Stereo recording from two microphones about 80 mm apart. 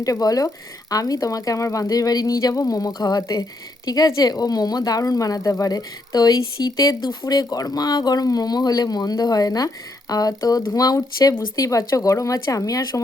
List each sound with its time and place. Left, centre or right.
0.0 s speech: left